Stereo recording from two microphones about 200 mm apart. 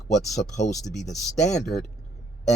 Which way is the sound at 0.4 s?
50° left (ahead or behind).